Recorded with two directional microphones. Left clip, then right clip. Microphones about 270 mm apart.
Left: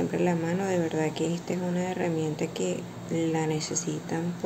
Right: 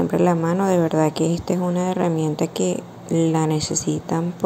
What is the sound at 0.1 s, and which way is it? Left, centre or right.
A woman's voice, right.